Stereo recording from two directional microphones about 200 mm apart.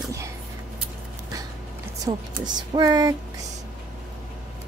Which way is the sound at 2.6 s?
20° right (ahead or behind).